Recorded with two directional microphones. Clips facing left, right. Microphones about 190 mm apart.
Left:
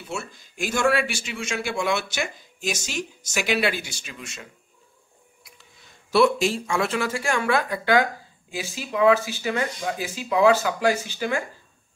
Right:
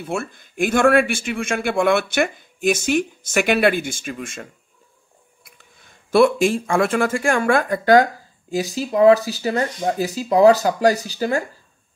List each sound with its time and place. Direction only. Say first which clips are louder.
0.0 s a man's voice: right 7 dB; 55° right (ahead or behind); by 11.4 s 40° right (ahead or behind)